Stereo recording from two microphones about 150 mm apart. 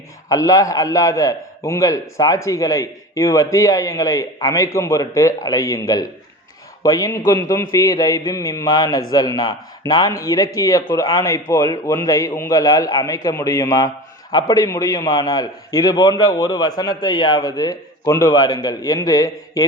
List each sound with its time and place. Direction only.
0.3 s a man's voice: 25° left (ahead or behind)